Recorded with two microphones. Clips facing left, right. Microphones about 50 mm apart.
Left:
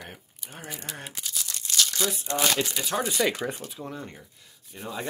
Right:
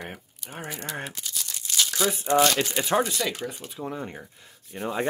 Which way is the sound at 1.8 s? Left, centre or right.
Centre.